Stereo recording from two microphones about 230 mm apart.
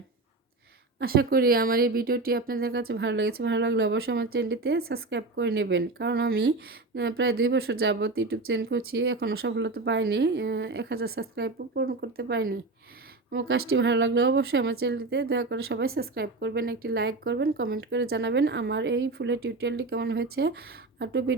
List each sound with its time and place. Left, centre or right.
0.9 s a woman's voice: right